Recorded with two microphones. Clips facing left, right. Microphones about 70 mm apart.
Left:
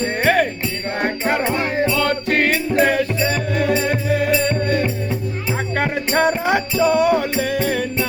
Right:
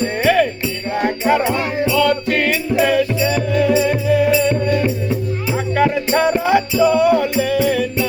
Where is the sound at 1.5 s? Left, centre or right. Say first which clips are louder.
Even; left.